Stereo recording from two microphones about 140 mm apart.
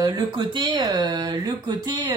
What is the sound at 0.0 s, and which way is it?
Speech, 30° right (ahead or behind).